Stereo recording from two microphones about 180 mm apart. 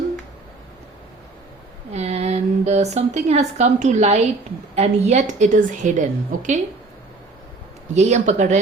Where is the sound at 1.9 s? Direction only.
35° right (ahead or behind).